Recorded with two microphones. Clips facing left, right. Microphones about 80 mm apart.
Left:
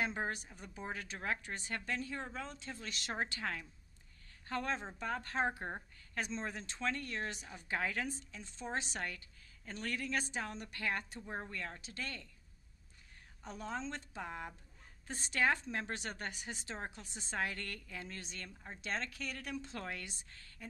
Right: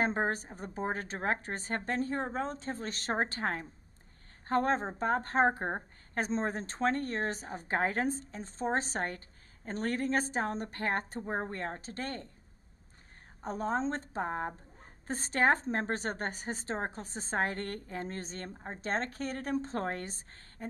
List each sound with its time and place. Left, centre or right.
0.0 s a woman's voice: right
13.4 s a woman's voice: right